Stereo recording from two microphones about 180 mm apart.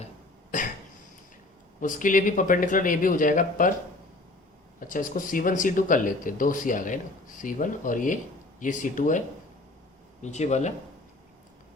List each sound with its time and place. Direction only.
0.5 s cough: 45° left (ahead or behind)
1.8 s speech: 45° left (ahead or behind)
4.8 s speech: 45° left (ahead or behind)